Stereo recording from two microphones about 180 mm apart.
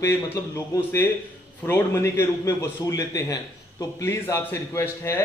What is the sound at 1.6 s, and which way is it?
A man's voice, 15° left (ahead or behind).